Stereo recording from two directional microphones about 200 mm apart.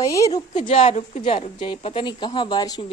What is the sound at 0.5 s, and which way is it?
A woman's voice, 35° left (ahead or behind).